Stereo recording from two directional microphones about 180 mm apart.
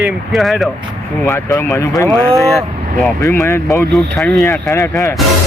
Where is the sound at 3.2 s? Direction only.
15° left (ahead or behind).